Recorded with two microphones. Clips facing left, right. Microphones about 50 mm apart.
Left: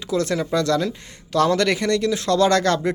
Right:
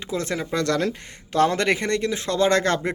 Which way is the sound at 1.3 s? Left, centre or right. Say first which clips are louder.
Left 1 dB; right.